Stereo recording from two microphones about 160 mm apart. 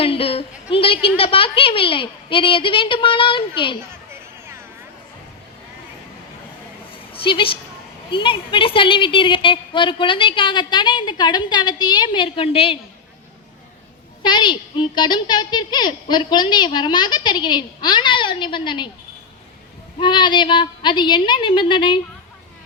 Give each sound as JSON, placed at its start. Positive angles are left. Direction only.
{"t": 0.0, "sound": "a woman's voice", "side_deg": 35}
{"t": 6.9, "sound": "a sound", "side_deg": 35}
{"t": 8.1, "sound": "a woman's voice", "side_deg": 30}
{"t": 14.2, "sound": "a child's voice", "side_deg": 30}
{"t": 20.0, "sound": "a child's voice", "side_deg": 30}